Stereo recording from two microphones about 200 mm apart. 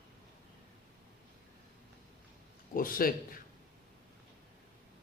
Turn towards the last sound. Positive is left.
turn(degrees=45)  # may be behind; listen again after turning